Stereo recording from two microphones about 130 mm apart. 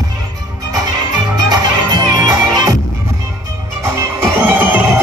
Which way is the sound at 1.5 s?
30° right (ahead or behind).